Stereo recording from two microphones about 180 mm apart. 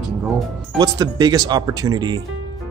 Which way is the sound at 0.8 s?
20° right (ahead or behind).